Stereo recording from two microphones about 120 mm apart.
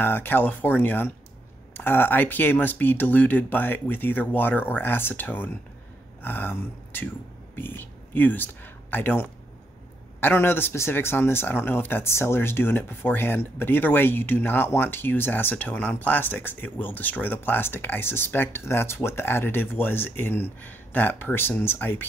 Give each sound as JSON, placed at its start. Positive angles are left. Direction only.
{"t": 0.0, "sound": "speech", "side_deg": 15}